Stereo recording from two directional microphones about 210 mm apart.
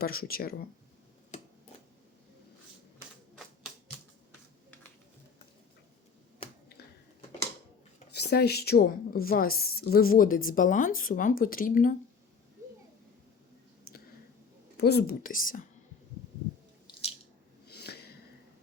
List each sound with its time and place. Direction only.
0.0 s a woman's voice: 45° left (ahead or behind)
1.3 s tick-tock: 35° left (ahead or behind)
8.1 s a woman's voice: 50° left (ahead or behind)
14.8 s a woman's voice: 50° left (ahead or behind)
16.8 s biting: 30° left (ahead or behind)
17.7 s a sound: 50° left (ahead or behind)